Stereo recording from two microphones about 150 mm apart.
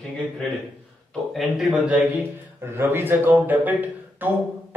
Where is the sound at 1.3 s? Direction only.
5° right (ahead or behind).